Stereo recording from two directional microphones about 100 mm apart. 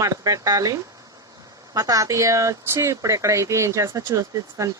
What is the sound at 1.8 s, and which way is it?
Speech, 35° right (ahead or behind).